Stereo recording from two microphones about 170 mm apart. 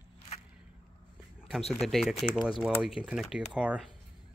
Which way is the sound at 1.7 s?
Centre (ahead or behind).